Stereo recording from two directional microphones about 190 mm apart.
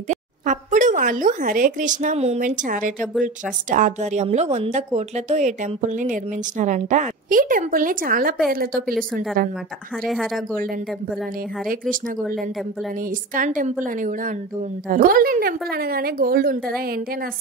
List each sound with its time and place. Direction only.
0.1 s a woman's voice: 40° right (ahead or behind)
10.0 s a woman's voice: centre (ahead or behind)
13.3 s speech: 45° right (ahead or behind)